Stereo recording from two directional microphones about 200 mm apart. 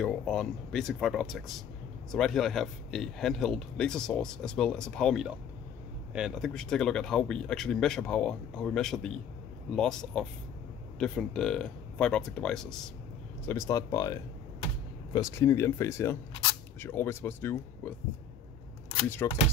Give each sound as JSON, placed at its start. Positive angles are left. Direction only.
{"t": 0.0, "sound": "speech", "side_deg": 5}
{"t": 13.5, "sound": "speech", "side_deg": 15}
{"t": 19.2, "sound": "speech", "side_deg": 10}